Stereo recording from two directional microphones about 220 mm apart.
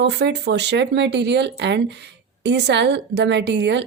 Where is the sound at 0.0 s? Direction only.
50° right (ahead or behind).